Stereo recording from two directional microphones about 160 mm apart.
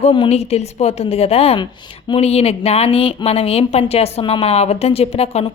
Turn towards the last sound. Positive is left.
turn(degrees=40)  # may be behind; listen again after turning